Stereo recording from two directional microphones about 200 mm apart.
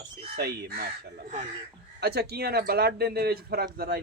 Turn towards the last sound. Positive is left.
turn(degrees=-50)  # may be behind; listen again after turning